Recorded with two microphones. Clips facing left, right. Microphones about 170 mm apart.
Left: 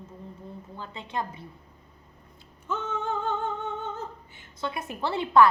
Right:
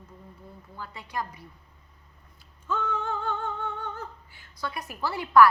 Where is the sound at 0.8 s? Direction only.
25° left (ahead or behind).